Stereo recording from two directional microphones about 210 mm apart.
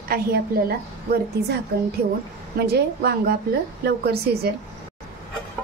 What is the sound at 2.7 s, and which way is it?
A woman's voice, 50° right (ahead or behind).